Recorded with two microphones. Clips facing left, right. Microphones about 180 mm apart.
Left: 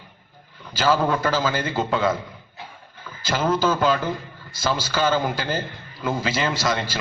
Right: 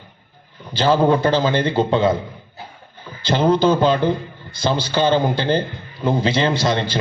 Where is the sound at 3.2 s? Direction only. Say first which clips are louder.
Right 6 dB; 30° right (ahead or behind).